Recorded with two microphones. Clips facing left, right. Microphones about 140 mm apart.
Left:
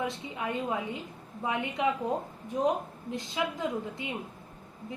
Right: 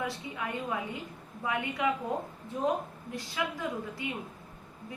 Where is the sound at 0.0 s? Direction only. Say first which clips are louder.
Left 2 dB; 20° left (ahead or behind).